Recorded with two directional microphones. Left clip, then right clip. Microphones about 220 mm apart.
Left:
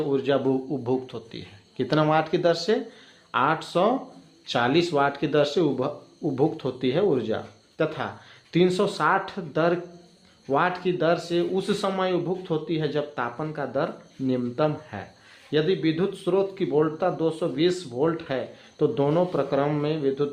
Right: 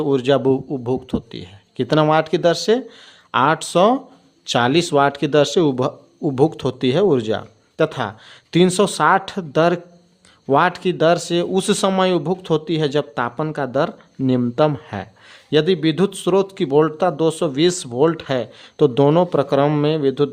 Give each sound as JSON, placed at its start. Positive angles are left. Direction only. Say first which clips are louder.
{"t": 0.0, "sound": "speech", "louder": "right 7 dB", "side_deg": -40}